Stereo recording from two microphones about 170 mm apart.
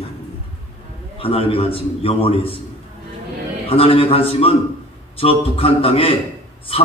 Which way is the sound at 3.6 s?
35° left (ahead or behind).